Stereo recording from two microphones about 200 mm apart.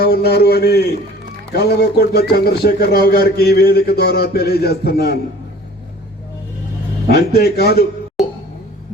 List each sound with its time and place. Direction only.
0.0 s speech: 50° left (ahead or behind)
7.1 s speech: 50° left (ahead or behind)